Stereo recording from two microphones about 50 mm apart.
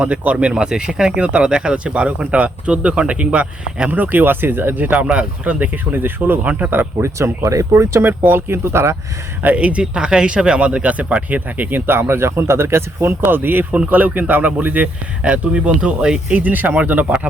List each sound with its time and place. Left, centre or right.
0.0 s speech: right
3.8 s speech: right
7.0 s speech: right
8.0 s speech: right
9.4 s speech: right
15.2 s speech: right
16.3 s speech: right